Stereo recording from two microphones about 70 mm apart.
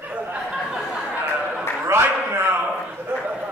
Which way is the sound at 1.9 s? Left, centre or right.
Right.